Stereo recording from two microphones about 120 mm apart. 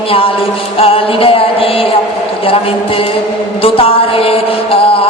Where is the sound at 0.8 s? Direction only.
50° left (ahead or behind).